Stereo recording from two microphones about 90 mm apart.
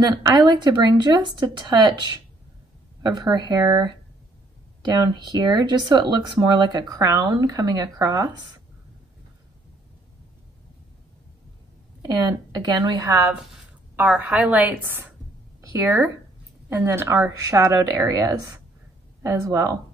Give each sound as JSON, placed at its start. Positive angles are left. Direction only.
{"t": 0.0, "sound": "speech", "side_deg": -50}
{"t": 3.0, "sound": "speech", "side_deg": -50}
{"t": 12.0, "sound": "speech", "side_deg": -50}
{"t": 13.9, "sound": "a woman's voice", "side_deg": -15}